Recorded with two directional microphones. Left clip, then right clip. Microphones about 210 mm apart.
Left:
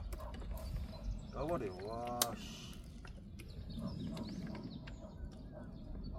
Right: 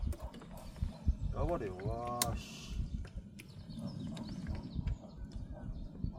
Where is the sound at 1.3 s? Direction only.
25° right (ahead or behind).